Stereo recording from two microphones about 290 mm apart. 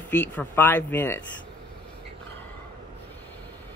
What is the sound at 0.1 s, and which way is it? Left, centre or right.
Speech, centre.